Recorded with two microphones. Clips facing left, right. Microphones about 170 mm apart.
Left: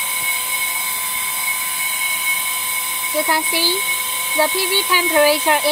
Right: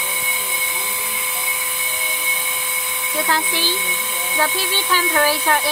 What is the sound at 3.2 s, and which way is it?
Speech, 10° left (ahead or behind).